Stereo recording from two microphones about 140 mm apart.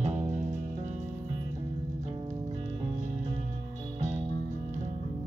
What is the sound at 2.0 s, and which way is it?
Music, 50° right (ahead or behind).